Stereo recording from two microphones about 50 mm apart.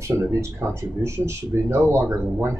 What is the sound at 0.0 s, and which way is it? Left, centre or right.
Speech, right.